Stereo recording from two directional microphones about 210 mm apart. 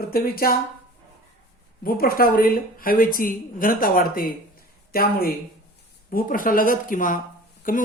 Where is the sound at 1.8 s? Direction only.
45° left (ahead or behind).